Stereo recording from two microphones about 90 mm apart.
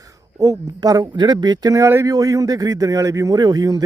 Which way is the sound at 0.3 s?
40° right (ahead or behind).